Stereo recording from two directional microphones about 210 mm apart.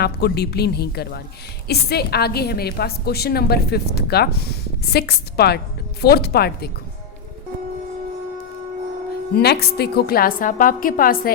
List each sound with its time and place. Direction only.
0.0 s a woman's voice: 50° left (ahead or behind)
9.3 s a woman's voice: 50° left (ahead or behind)